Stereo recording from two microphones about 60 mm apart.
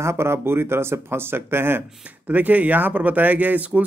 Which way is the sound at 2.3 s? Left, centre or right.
Right.